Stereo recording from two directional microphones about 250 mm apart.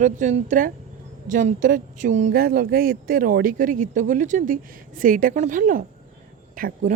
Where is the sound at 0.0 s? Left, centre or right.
Right.